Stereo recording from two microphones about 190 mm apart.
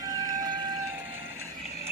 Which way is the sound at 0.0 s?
15° right (ahead or behind).